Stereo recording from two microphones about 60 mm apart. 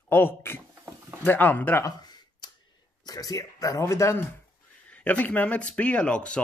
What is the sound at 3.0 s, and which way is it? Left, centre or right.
Speech, left.